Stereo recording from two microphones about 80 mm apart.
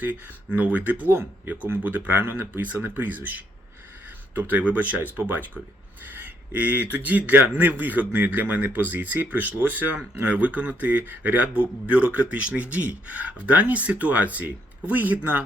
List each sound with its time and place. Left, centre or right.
0.0 s a man's voice: right